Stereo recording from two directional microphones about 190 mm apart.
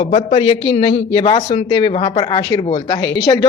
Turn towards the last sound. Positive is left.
turn(degrees=20)  # may be behind; listen again after turning